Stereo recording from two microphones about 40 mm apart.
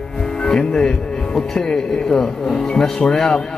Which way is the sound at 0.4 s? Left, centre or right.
Centre.